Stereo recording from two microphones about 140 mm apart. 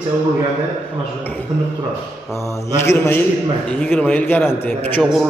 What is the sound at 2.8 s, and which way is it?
A man's voice, 15° left (ahead or behind).